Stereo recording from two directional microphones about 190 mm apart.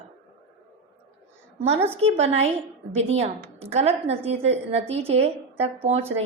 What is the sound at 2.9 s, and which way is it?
A woman's voice, 35° right (ahead or behind).